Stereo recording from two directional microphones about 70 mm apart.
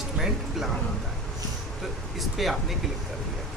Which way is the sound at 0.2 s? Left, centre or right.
Centre.